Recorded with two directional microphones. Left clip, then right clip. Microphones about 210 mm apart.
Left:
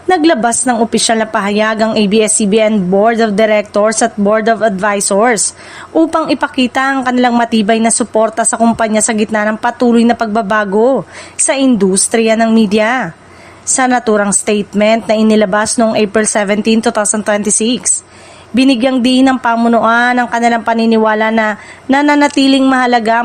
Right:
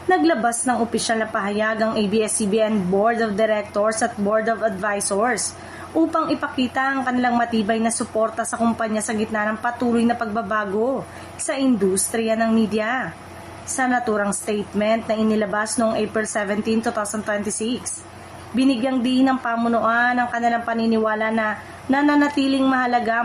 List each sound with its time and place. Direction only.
0.1 s a woman's voice: 45° left (ahead or behind)